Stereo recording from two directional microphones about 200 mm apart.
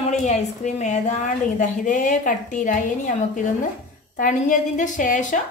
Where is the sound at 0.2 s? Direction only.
35° left (ahead or behind).